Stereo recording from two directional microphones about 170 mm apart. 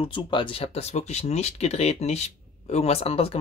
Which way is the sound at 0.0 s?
30° left (ahead or behind).